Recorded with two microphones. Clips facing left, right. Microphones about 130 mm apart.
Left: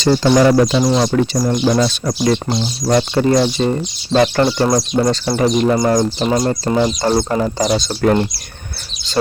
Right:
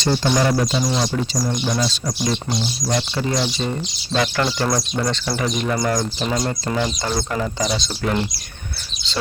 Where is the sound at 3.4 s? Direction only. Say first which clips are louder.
Left 7 dB; 40° left (ahead or behind).